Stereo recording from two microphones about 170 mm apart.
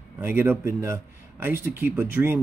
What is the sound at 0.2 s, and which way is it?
Speech, 15° right (ahead or behind).